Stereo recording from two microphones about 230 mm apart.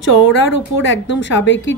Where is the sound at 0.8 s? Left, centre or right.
Left.